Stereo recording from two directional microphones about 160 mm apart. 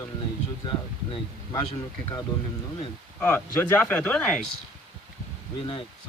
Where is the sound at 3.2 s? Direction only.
10° left (ahead or behind).